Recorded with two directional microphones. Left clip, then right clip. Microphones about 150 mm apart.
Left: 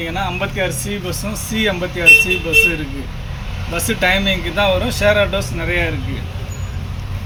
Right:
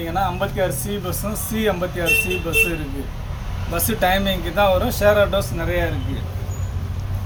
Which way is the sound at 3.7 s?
15° right (ahead or behind).